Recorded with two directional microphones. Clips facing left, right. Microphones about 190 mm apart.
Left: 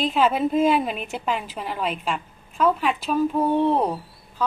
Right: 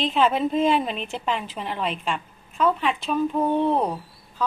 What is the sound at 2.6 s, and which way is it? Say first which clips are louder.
A woman's voice: left 1 dB; 5° left (ahead or behind).